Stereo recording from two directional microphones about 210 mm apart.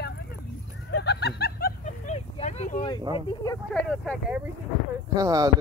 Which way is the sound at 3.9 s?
5° left (ahead or behind).